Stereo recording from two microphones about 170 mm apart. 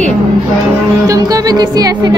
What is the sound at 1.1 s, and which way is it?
Music, 20° right (ahead or behind).